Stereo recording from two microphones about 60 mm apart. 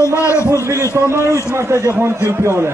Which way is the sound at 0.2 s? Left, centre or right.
Left.